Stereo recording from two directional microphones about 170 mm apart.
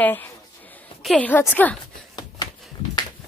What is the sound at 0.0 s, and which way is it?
A woman's voice, 10° left (ahead or behind).